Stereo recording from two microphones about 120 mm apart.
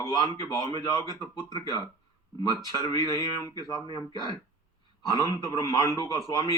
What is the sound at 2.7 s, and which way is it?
Speech, 30° left (ahead or behind).